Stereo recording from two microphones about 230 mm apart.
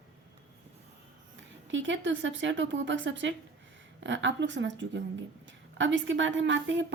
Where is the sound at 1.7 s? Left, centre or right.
Right.